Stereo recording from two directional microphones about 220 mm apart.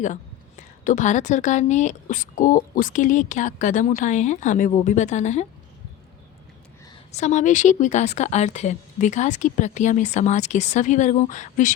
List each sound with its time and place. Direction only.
0.9 s speech: 35° left (ahead or behind)
7.1 s speech: 30° left (ahead or behind)